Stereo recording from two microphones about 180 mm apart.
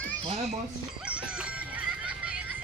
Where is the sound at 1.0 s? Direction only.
5° right (ahead or behind).